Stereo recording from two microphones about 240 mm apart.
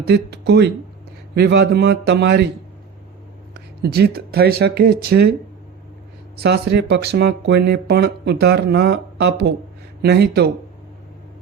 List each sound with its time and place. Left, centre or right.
0.0 s speech: right
3.5 s speech: right
6.3 s speech: right